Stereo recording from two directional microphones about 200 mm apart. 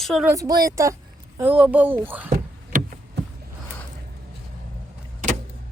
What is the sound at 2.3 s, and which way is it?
Vehicle, 40° right (ahead or behind).